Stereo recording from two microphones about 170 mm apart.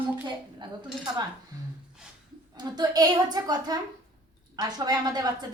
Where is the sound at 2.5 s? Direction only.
25° right (ahead or behind).